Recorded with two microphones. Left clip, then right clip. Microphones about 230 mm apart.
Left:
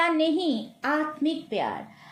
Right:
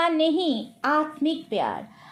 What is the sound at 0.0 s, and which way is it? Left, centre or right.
A child's voice, centre.